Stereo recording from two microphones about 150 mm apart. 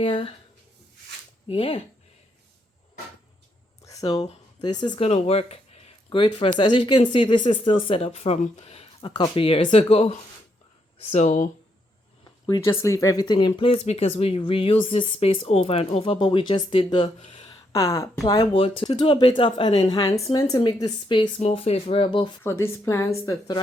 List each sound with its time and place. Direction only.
0.0 s speech: 35° left (ahead or behind)
1.5 s speech: 40° left (ahead or behind)
3.8 s speech: 25° left (ahead or behind)
5.0 s speech: 45° left (ahead or behind)
9.0 s speech: 30° left (ahead or behind); by 11.4 s 50° left (ahead or behind)
12.5 s speech: 20° left (ahead or behind); by 17.5 s 40° left (ahead or behind)
17.5 s a sound: 25° left (ahead or behind)
18.3 s speech: 30° left (ahead or behind)
20.1 s speech: 20° left (ahead or behind)
22.4 s speech: 15° left (ahead or behind)